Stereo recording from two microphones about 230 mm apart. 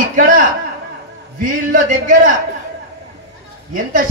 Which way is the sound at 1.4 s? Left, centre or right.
Right.